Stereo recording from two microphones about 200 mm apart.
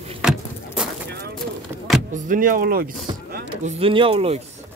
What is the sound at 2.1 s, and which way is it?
Speech, 45° right (ahead or behind).